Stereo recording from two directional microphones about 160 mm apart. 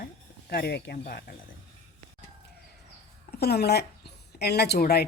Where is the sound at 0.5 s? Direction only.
90° left; by 1.4 s 75° left (ahead or behind).